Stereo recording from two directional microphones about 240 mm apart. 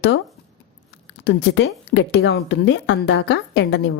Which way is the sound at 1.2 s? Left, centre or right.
Left.